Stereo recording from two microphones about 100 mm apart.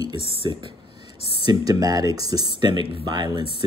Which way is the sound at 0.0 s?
55° right (ahead or behind).